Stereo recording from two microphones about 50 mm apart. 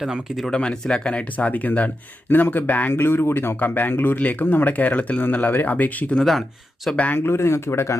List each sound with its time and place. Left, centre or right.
0.0 s speech: centre
0.5 s speech: centre; by 2.9 s left
2.9 s speech: left
7.2 s speech: left